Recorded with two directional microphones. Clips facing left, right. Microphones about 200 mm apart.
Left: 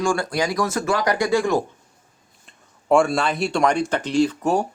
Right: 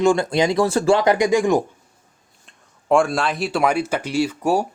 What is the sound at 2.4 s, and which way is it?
Speech, centre (ahead or behind).